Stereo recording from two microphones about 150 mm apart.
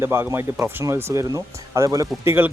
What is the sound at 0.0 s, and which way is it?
Speech, 15° right (ahead or behind).